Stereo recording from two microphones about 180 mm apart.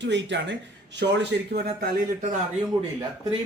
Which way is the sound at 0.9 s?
65° right (ahead or behind).